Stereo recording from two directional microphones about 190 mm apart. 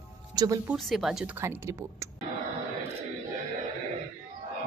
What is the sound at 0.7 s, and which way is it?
Speech, centre (ahead or behind).